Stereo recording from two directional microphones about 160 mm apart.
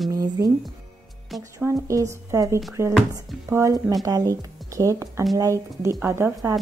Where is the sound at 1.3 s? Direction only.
Centre (ahead or behind).